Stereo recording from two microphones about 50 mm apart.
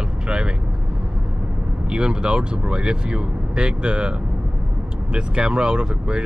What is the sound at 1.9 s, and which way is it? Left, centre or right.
Speech, centre.